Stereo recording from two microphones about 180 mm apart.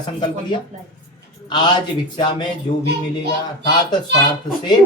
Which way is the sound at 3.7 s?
25° left (ahead or behind).